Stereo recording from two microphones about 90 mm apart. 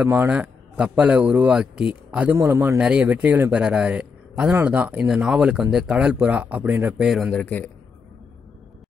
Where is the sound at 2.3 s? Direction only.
30° right (ahead or behind).